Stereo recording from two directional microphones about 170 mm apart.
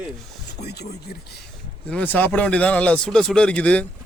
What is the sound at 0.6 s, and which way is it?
Speech, 75° left (ahead or behind).